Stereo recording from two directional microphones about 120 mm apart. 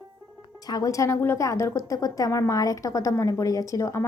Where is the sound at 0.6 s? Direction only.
30° left (ahead or behind).